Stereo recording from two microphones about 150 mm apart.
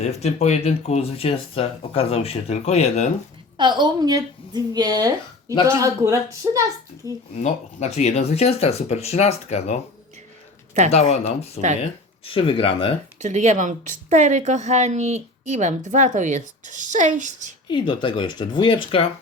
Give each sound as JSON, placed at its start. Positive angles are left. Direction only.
{"t": 0.0, "sound": "speech", "side_deg": 45}
{"t": 3.6, "sound": "a woman's voice", "side_deg": -30}
{"t": 7.3, "sound": "speech", "side_deg": 50}
{"t": 10.9, "sound": "speech", "side_deg": 45}
{"t": 13.1, "sound": "a woman's voice", "side_deg": -50}
{"t": 17.7, "sound": "speech", "side_deg": 30}